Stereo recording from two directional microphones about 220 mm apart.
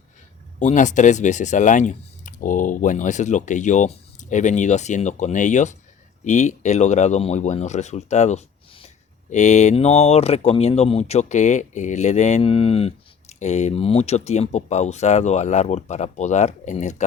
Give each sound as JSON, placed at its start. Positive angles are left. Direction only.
{"t": 0.6, "sound": "speech", "side_deg": 35}